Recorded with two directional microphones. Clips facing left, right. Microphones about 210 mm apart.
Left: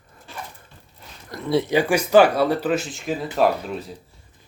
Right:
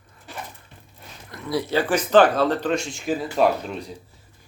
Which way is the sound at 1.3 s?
30° left (ahead or behind).